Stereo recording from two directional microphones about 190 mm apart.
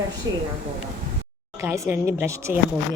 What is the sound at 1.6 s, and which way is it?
Speech, 15° right (ahead or behind).